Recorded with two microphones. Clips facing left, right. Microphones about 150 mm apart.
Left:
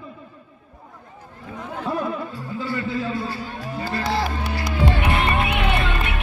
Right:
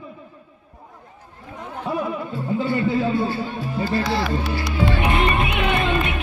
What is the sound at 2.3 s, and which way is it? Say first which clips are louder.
Music: right 6 dB; 20° right (ahead or behind).